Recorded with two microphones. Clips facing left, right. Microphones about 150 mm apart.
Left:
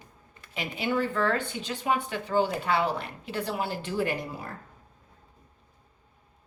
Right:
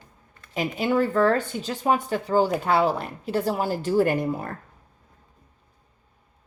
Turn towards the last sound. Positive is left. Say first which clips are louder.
# right 8 dB
turn(degrees=-50)  # may be behind; listen again after turning